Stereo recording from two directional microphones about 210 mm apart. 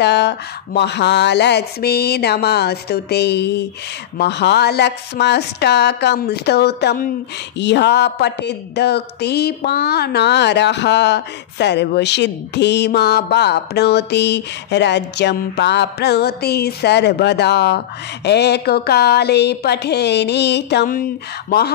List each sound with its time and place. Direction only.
0.0 s a woman's voice: 55° left (ahead or behind)